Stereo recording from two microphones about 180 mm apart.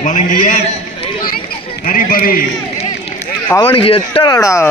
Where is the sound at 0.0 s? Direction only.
45° left (ahead or behind).